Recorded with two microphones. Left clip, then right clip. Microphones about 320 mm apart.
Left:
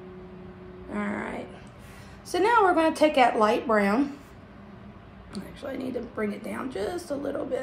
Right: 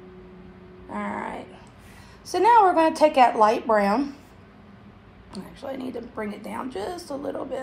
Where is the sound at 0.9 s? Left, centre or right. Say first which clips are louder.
Right 2 dB; centre.